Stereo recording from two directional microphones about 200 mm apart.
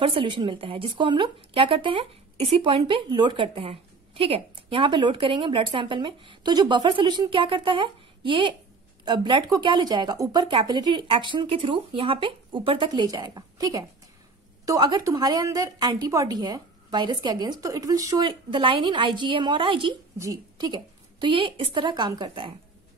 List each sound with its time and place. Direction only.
0.0 s speech: 25° right (ahead or behind)